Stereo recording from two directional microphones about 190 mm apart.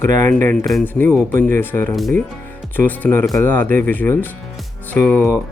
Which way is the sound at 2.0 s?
Centre (ahead or behind).